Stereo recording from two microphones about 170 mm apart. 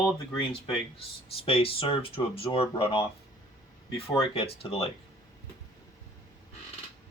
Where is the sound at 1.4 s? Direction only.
35° left (ahead or behind).